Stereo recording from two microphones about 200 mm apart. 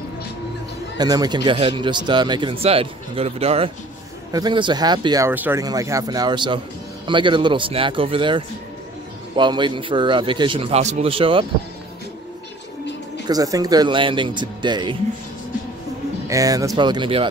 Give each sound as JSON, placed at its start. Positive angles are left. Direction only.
{"t": 0.9, "sound": "speech", "side_deg": -20}
{"t": 13.3, "sound": "speech", "side_deg": -20}
{"t": 16.3, "sound": "speech", "side_deg": -15}